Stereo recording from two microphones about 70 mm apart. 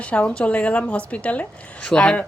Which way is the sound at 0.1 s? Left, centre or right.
Centre.